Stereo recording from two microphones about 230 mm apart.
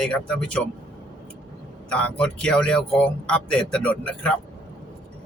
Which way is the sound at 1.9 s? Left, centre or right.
Centre.